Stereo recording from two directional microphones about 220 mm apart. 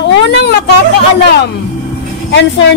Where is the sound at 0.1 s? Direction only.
50° left (ahead or behind).